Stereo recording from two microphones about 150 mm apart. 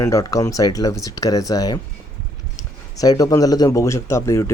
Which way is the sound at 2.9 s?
25° left (ahead or behind).